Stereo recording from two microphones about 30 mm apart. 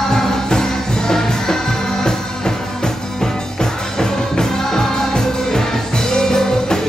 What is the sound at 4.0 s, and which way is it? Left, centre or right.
Music, centre.